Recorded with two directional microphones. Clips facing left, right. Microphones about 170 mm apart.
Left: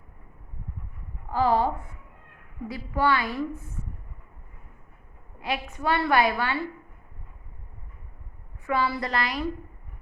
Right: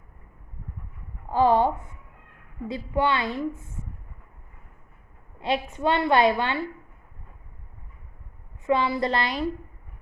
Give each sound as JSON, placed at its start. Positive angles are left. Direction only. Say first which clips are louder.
{"t": 1.3, "sound": "a woman's voice", "louder": "right 3 dB", "side_deg": -20}
{"t": 5.4, "sound": "a woman's voice", "louder": "right 5 dB", "side_deg": -25}
{"t": 8.6, "sound": "a woman's voice", "louder": "right 4 dB", "side_deg": -20}